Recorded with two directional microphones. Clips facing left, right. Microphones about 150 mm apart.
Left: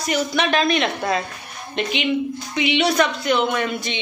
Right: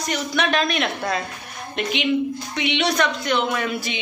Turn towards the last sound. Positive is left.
turn(degrees=-5)  # may be behind; listen again after turning